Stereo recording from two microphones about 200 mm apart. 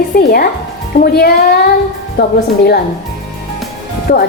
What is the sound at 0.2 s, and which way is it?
A woman's voice, 50° left (ahead or behind).